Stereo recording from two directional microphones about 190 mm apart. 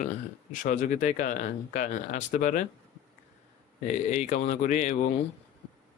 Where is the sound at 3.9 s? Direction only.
40° left (ahead or behind).